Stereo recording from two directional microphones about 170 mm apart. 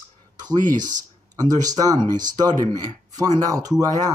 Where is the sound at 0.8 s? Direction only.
25° right (ahead or behind).